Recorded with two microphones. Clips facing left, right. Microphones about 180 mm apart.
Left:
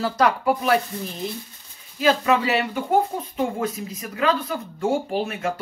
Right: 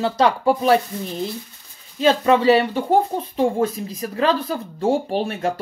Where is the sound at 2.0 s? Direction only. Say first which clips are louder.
Right 4 dB; 30° right (ahead or behind).